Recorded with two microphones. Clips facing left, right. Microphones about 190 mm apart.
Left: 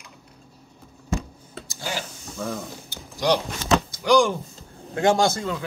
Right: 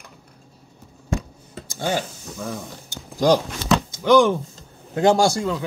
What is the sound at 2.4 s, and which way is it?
Speech, centre (ahead or behind).